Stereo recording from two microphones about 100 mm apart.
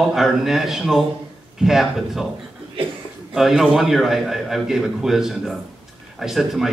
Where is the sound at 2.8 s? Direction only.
65° right (ahead or behind).